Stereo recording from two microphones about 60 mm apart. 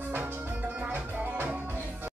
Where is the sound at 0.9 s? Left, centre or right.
Right.